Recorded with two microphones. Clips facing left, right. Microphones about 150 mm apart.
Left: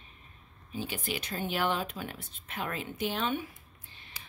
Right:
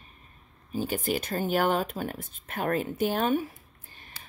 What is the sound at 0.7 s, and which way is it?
A woman's voice, 45° right (ahead or behind).